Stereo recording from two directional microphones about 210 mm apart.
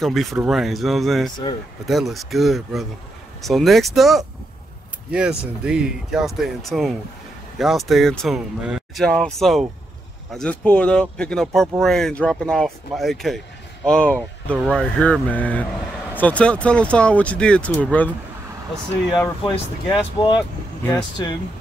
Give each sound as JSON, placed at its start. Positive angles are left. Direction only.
{"t": 0.0, "sound": "speech", "side_deg": 0}
{"t": 19.4, "sound": "speech", "side_deg": 20}